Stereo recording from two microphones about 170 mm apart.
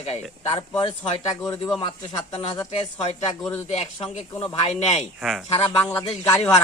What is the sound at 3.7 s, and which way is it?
Speech, 35° left (ahead or behind).